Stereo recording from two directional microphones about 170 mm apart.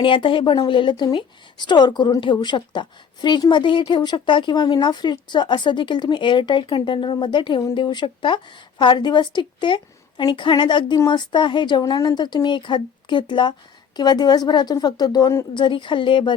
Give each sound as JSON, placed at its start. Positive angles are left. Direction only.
{"t": 0.0, "sound": "a woman's voice", "side_deg": 30}